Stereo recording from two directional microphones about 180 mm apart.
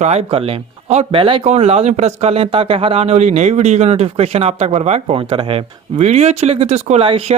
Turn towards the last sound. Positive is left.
turn(degrees=-30)  # may be behind; listen again after turning